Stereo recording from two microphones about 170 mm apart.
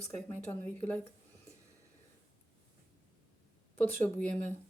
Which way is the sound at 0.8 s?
10° left (ahead or behind).